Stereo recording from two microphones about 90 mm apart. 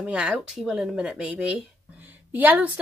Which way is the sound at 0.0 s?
10° right (ahead or behind).